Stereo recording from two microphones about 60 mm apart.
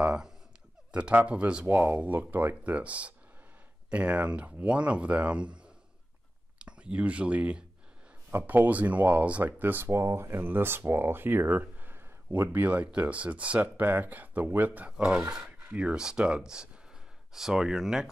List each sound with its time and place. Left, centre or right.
0.0 s a sound: centre
0.9 s speech: right
2.0 s speech: right
8.3 s speech: right
9.9 s speech: right
15.0 s speech: centre